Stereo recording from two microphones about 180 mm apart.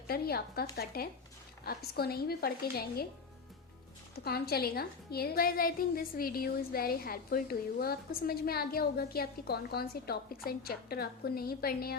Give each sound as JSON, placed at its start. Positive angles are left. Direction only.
{"t": 0.1, "sound": "a woman's voice", "side_deg": 60}
{"t": 4.1, "sound": "a woman's voice", "side_deg": 60}